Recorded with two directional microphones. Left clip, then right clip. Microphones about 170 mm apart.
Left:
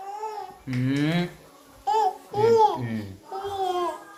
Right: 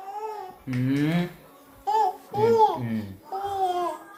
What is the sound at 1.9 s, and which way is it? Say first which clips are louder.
Speech: even; 15° right (ahead or behind).